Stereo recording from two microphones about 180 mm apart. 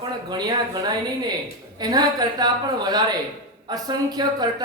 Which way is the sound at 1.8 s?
20° right (ahead or behind).